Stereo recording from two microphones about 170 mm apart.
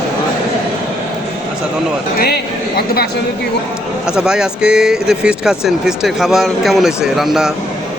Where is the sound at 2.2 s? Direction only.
65° left (ahead or behind).